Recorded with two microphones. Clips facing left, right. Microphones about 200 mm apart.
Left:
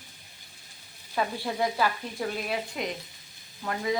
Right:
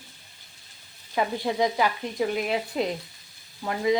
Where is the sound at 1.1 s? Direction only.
15° right (ahead or behind).